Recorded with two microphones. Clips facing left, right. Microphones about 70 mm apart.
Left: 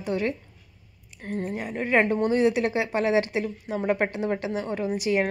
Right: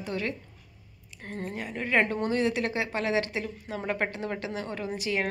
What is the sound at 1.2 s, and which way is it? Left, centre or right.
A woman's voice, centre.